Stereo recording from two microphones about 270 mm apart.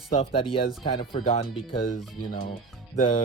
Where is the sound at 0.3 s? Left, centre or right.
Centre.